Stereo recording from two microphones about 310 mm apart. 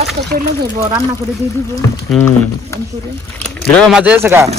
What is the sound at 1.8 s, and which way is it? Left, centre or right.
Speech, centre.